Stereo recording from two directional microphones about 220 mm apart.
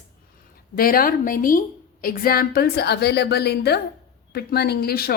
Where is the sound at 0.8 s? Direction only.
40° left (ahead or behind).